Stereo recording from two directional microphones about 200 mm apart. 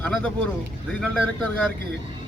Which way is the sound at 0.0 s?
5° left (ahead or behind).